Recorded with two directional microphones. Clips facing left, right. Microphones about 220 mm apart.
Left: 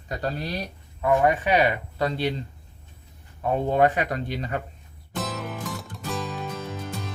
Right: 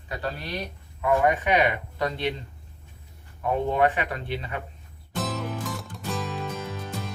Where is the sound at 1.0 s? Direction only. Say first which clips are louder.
Left 1 dB; 30° left (ahead or behind).